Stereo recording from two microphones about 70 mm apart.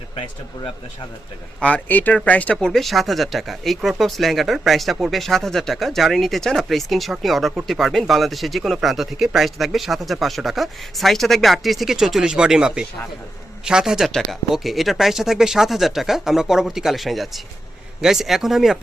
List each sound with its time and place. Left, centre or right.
1.6 s speech: left
2.6 s speech: centre